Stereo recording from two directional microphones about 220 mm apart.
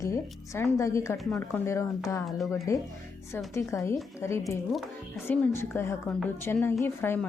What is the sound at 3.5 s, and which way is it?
A woman's voice, 15° left (ahead or behind).